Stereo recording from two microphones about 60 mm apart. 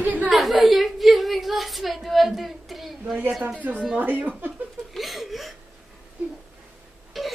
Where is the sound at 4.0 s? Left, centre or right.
Right.